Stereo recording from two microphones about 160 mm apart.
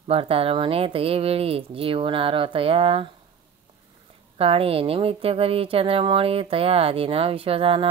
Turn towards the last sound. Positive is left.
turn(degrees=-35)  # may be behind; listen again after turning